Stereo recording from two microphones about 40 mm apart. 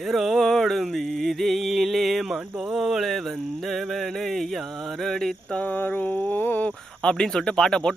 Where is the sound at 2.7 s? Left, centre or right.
Centre.